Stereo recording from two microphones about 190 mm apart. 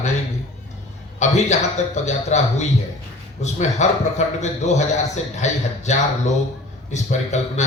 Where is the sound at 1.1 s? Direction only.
35° left (ahead or behind).